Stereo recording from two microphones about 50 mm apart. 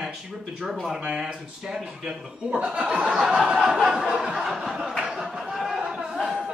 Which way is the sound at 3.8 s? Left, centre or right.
Centre.